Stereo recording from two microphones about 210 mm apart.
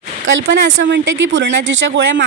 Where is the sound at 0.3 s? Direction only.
60° right (ahead or behind).